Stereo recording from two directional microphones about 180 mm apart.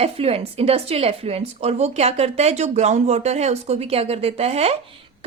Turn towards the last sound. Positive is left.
turn(degrees=-35)  # may be behind; listen again after turning